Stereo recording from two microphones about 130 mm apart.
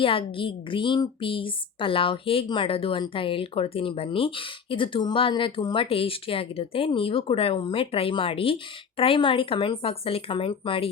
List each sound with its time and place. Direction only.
0.0 s a woman's voice: 40° left (ahead or behind)